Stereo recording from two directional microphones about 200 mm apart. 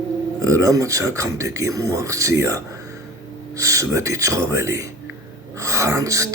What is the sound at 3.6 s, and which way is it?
Speech, 15° right (ahead or behind).